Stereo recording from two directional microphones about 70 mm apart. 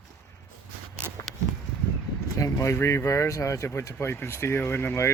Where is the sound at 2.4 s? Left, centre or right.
Left.